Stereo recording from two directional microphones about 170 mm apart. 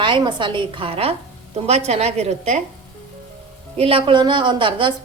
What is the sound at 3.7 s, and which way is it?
A woman's voice, 30° right (ahead or behind).